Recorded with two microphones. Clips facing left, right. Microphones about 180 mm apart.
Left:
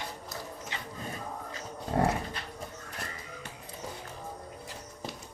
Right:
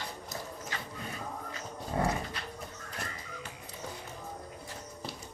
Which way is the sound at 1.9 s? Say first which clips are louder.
Left 4 dB; 45° left (ahead or behind).